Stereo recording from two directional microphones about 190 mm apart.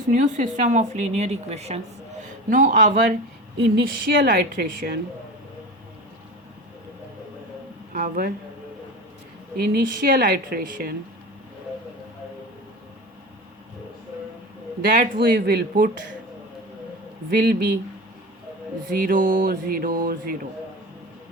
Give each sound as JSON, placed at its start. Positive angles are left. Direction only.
{"t": 0.1, "sound": "a woman's voice", "side_deg": -40}
{"t": 3.8, "sound": "a woman's voice", "side_deg": -60}
{"t": 7.9, "sound": "speech", "side_deg": -50}
{"t": 9.6, "sound": "speech", "side_deg": -50}
{"t": 14.8, "sound": "speech", "side_deg": -50}
{"t": 17.3, "sound": "speech", "side_deg": -50}
{"t": 18.9, "sound": "speech", "side_deg": -45}